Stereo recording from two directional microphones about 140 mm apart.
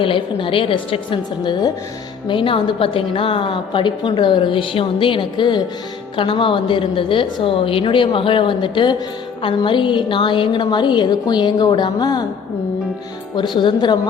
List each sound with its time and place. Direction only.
0.0 s a woman's voice: 40° left (ahead or behind)
13.6 s a woman's voice: 35° left (ahead or behind)